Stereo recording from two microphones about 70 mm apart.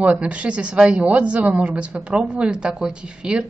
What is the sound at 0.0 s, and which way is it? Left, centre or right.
A woman's voice, centre.